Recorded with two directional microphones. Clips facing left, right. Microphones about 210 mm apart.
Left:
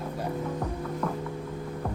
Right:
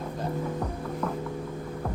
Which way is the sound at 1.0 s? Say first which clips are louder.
Even; 5° right (ahead or behind).